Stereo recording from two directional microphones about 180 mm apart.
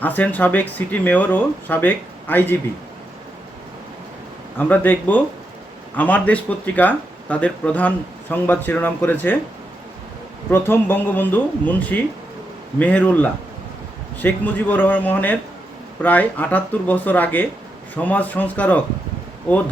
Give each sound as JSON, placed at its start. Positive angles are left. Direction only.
{"t": 0.0, "sound": "speech", "side_deg": 10}
{"t": 4.5, "sound": "speech", "side_deg": 10}
{"t": 10.5, "sound": "speech", "side_deg": 10}